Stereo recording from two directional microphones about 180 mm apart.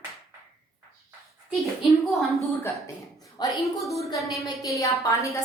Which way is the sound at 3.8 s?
Centre (ahead or behind).